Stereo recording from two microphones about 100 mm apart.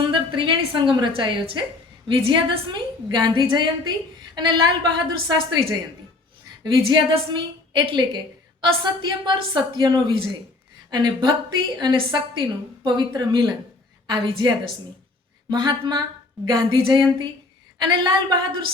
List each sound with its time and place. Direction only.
0.1 s a woman's voice: 55° right (ahead or behind)
17.7 s a woman's voice: 45° right (ahead or behind)